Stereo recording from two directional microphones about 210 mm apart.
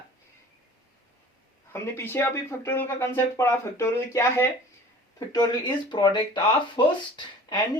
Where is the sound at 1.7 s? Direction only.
10° left (ahead or behind).